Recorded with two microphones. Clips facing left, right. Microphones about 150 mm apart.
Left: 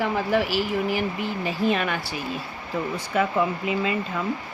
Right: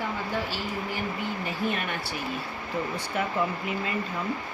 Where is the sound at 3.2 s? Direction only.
90° left.